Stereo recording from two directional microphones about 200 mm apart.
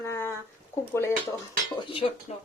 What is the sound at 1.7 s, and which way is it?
Speech, 30° left (ahead or behind).